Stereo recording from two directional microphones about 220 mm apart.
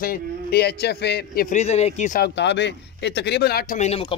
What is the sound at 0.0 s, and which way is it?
Speech, 45° left (ahead or behind).